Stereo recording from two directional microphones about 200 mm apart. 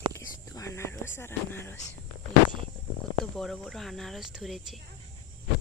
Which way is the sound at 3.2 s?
Centre (ahead or behind).